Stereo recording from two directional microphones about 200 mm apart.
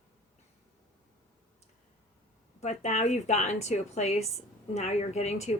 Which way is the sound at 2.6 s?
35° left (ahead or behind).